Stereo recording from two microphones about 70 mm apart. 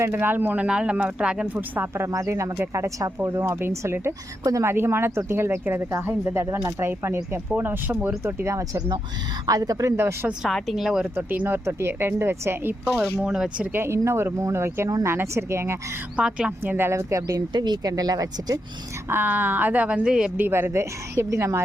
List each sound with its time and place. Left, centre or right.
0.1 s speech: right; by 1.5 s centre
1.5 s speech: right
2.0 s speech: right
7.5 s speech: right
9.5 s speech: right
10.4 s speech: centre
11.1 s speech: right
13.1 s speech: centre
13.7 s speech: right
16.1 s speech: centre
16.5 s speech: right
17.5 s speech: right
19.0 s speech: right; by 20.3 s centre
20.3 s speech: right